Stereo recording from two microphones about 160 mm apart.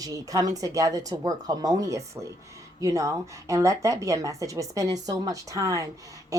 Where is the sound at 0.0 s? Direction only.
20° right (ahead or behind).